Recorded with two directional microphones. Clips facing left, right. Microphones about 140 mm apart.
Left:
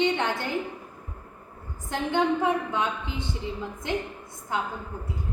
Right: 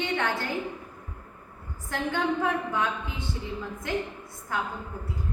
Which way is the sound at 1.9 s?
20° left (ahead or behind).